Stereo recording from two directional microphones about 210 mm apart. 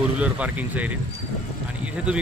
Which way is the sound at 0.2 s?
5° right (ahead or behind).